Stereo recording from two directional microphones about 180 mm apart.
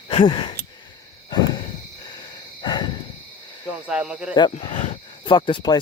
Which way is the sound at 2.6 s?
25° left (ahead or behind).